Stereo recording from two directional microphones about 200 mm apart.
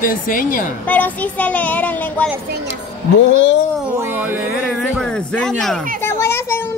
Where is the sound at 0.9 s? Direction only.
10° left (ahead or behind).